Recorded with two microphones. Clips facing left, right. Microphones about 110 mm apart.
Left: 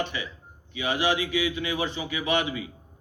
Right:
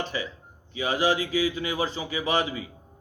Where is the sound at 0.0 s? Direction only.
35° right (ahead or behind).